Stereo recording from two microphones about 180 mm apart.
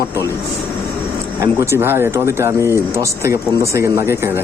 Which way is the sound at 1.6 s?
15° right (ahead or behind).